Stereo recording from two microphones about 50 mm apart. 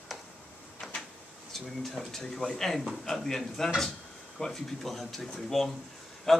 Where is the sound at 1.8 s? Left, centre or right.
Centre.